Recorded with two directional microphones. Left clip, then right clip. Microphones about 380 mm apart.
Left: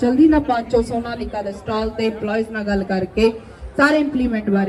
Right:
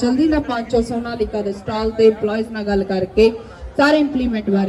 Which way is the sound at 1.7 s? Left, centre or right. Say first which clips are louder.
Right 8 dB; centre.